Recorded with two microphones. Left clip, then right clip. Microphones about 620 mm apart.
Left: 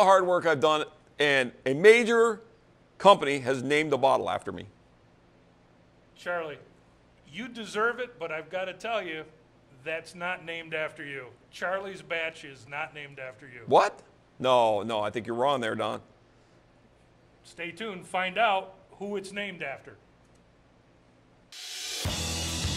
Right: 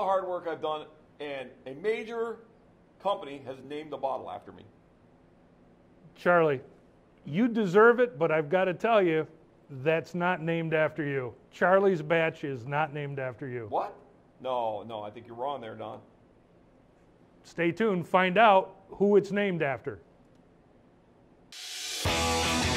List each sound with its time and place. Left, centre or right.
0.0 s a man's voice: left
6.2 s speech: right
13.7 s a man's voice: left
17.5 s speech: right
21.5 s music: centre